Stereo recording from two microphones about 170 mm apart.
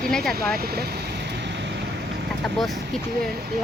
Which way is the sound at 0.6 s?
65° right (ahead or behind).